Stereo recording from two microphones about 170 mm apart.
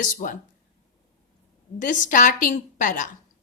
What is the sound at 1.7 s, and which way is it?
A woman's voice, 50° left (ahead or behind).